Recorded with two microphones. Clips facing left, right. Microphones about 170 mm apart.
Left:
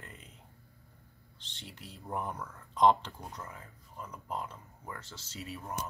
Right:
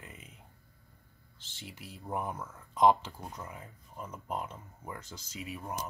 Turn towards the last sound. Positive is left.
turn(degrees=-10)  # may be behind; listen again after turning